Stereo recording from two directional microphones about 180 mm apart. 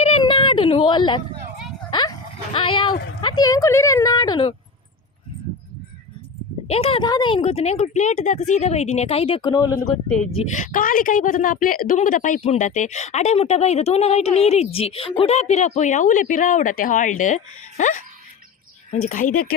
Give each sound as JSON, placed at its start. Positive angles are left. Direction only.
{"t": 0.0, "sound": "a sound", "side_deg": 30}
{"t": 3.2, "sound": "speech", "side_deg": 25}
{"t": 6.7, "sound": "a woman's voice", "side_deg": 35}
{"t": 9.6, "sound": "speech", "side_deg": 15}
{"t": 10.5, "sound": "a woman's voice", "side_deg": 50}